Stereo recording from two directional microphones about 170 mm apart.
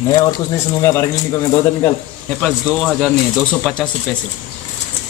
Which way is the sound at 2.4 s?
5° left (ahead or behind).